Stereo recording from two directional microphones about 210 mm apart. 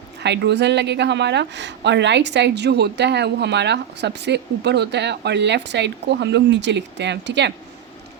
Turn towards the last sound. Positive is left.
turn(degrees=-55)  # may be behind; listen again after turning